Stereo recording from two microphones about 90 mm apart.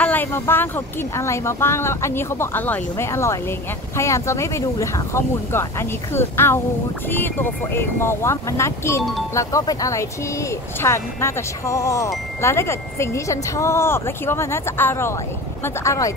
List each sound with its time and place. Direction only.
0.0 s speech: 20° left (ahead or behind)
3.1 s speech: 30° left (ahead or behind)